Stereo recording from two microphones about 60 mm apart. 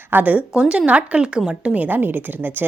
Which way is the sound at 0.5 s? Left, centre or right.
Centre.